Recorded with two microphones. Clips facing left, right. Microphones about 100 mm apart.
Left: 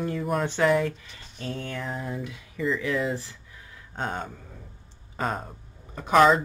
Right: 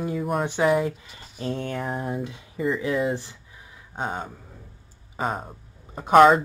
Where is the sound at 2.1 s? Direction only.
25° right (ahead or behind).